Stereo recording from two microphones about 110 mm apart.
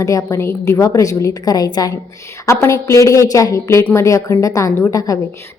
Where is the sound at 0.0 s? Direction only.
30° left (ahead or behind).